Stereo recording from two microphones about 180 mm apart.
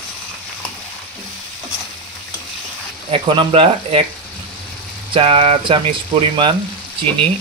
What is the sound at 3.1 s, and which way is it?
Stir, 30° right (ahead or behind).